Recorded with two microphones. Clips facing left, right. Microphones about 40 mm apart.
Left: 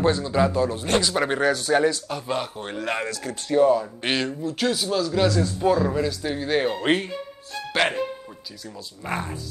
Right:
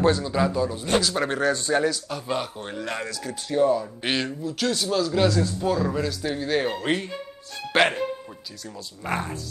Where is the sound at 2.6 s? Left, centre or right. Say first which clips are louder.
Left 3 dB; left.